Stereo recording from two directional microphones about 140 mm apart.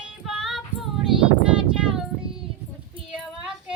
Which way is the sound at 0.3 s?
5° right (ahead or behind).